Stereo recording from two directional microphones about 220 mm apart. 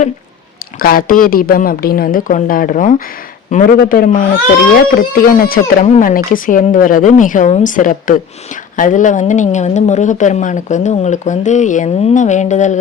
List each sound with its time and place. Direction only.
0.8 s a woman's voice: 40° left (ahead or behind)